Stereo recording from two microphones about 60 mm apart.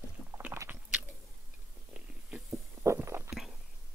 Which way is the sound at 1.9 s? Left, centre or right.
Right.